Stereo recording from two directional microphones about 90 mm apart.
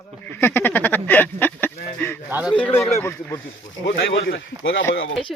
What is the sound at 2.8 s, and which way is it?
Speech, 25° left (ahead or behind).